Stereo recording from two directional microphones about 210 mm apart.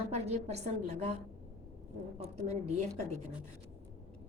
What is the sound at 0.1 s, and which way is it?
A woman's voice, 30° right (ahead or behind).